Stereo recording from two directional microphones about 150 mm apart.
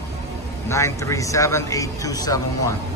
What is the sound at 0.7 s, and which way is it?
A man's voice, 20° left (ahead or behind).